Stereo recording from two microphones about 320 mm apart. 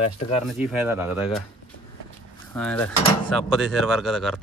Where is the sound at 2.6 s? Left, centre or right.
Centre.